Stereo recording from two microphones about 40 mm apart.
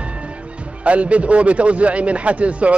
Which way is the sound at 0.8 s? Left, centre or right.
Right.